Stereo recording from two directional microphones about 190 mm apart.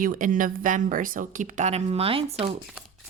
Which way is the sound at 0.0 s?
45° right (ahead or behind).